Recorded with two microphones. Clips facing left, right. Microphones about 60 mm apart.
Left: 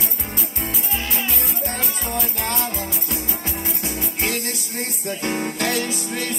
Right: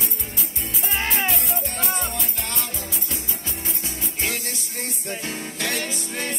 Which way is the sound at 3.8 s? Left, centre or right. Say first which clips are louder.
Left 3 dB; left.